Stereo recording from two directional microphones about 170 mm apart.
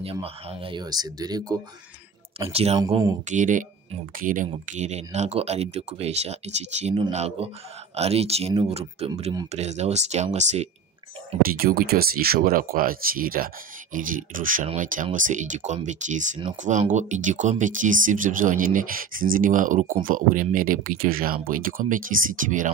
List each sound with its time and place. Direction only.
0.0 s speech: 35° right (ahead or behind)
2.3 s speech: 35° right (ahead or behind)
3.3 s speech: 50° right (ahead or behind)
11.4 s speech: 60° right (ahead or behind)